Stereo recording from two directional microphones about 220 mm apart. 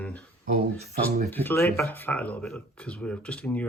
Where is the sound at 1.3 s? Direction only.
10° left (ahead or behind).